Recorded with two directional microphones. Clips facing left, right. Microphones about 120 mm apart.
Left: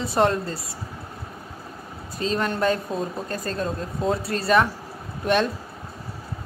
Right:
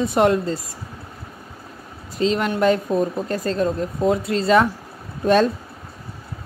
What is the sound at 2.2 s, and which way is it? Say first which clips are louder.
Speech: right 5 dB; 20° right (ahead or behind).